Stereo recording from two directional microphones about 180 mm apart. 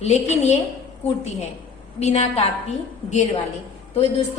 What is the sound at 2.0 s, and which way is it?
Speech, 35° left (ahead or behind).